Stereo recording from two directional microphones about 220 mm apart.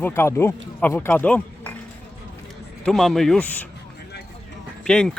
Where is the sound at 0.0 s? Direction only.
10° left (ahead or behind).